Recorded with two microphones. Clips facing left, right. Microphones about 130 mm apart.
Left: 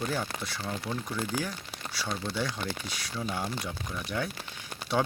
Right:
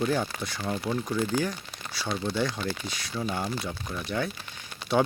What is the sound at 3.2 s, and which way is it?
Speech, 5° right (ahead or behind).